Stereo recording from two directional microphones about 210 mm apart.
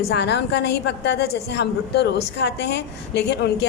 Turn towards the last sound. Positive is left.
turn(degrees=50)  # may be behind; listen again after turning